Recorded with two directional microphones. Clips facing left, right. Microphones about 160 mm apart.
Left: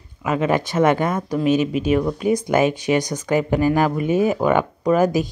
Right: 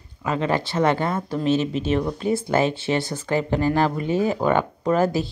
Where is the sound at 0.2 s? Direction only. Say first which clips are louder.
Left 3 dB; 15° left (ahead or behind).